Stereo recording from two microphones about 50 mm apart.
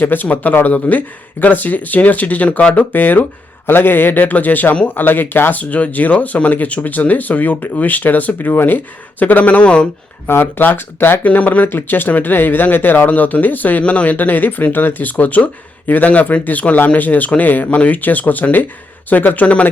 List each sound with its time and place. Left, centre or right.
0.0 s speech: left
2.9 s speech: left
10.2 s speech: left
11.2 s speech: left
13.1 s speech: left